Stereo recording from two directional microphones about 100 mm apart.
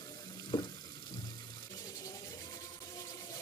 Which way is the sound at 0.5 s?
45° left (ahead or behind).